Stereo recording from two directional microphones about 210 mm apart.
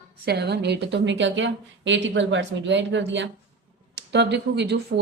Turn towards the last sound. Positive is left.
turn(degrees=-55)  # may be behind; listen again after turning